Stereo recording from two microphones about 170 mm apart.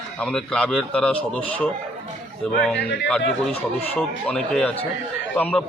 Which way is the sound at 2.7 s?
90° left.